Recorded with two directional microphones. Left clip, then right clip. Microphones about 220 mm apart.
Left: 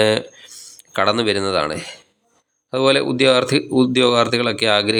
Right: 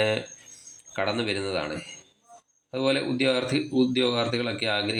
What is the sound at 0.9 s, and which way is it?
Speech, 30° left (ahead or behind).